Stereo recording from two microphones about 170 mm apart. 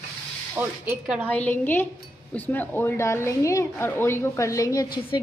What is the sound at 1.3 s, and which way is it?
A woman's voice, 10° left (ahead or behind).